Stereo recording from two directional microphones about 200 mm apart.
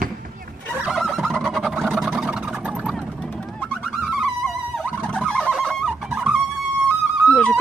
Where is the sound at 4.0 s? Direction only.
5° right (ahead or behind).